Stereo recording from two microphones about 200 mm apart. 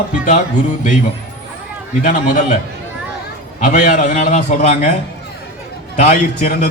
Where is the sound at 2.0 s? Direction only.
40° left (ahead or behind).